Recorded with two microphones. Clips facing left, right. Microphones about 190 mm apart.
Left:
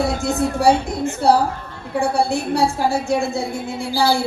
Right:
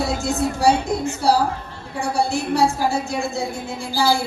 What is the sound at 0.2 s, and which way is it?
Speech, 60° left (ahead or behind).